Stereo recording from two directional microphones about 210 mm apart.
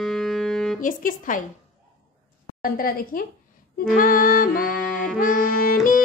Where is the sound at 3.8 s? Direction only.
40° left (ahead or behind).